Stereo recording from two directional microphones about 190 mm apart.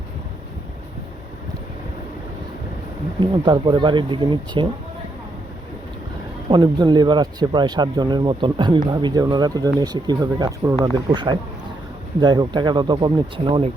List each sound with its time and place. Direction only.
3.2 s speech: 25° right (ahead or behind)
6.5 s speech: 25° right (ahead or behind)